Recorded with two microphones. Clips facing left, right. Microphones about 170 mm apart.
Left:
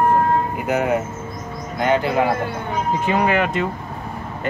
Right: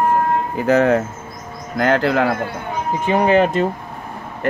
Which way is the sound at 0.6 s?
90° right.